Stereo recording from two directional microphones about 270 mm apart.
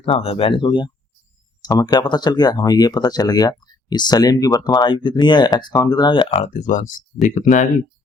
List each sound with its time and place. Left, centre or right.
0.0 s speech: left